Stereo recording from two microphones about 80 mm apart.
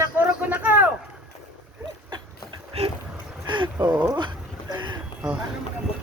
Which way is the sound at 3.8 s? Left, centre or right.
Right.